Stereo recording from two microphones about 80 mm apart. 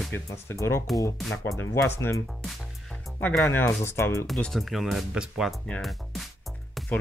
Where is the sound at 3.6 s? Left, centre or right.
Left.